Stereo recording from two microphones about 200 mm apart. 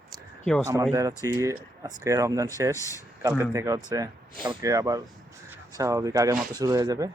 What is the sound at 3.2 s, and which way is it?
Speech, 15° right (ahead or behind).